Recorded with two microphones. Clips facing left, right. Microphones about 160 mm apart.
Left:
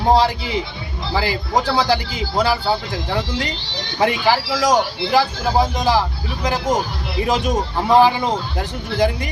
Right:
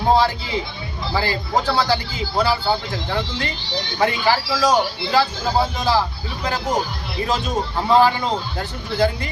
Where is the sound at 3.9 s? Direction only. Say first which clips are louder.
Left 2 dB; 10° left (ahead or behind).